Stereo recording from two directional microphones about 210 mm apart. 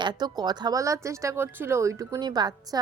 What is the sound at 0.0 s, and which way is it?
Speech, 20° right (ahead or behind).